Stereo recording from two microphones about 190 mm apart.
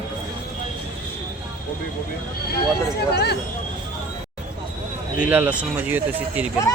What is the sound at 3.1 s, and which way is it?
Speech, 60° left (ahead or behind).